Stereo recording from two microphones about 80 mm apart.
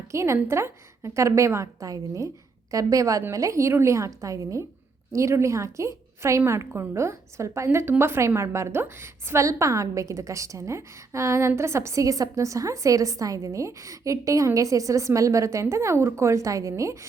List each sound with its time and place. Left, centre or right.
0.1 s a woman's voice: right
9.4 s a woman's voice: right